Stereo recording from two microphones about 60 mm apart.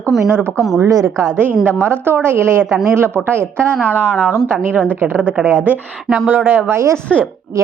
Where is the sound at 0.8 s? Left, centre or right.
Right.